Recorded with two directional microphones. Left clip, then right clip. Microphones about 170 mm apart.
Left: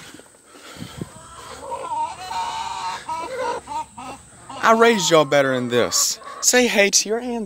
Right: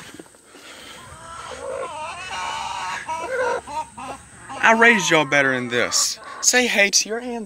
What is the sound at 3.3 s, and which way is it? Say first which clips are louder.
Chicken: right 5 dB; 30° left (ahead or behind).